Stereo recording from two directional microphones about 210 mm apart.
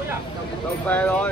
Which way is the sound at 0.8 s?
5° left (ahead or behind).